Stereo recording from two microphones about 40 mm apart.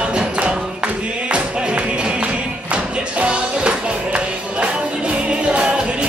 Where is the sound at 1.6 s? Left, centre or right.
Right.